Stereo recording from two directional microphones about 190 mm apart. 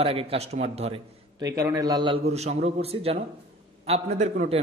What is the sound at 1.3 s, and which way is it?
A man's voice, 20° right (ahead or behind).